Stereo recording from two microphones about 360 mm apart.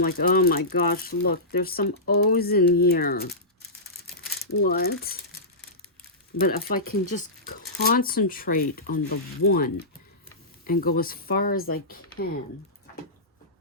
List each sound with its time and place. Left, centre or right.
0.0 s speech: left
4.6 s speech: left
6.4 s speech: left